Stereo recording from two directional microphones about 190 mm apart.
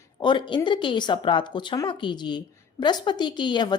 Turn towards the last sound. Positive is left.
turn(degrees=25)  # may be behind; listen again after turning